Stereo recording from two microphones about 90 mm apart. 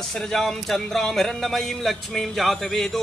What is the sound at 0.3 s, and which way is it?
Speech, 5° left (ahead or behind).